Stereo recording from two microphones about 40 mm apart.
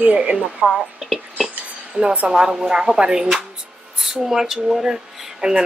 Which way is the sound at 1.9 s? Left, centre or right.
Right.